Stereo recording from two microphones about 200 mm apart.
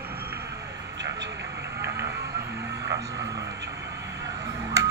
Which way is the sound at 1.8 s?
55° right (ahead or behind).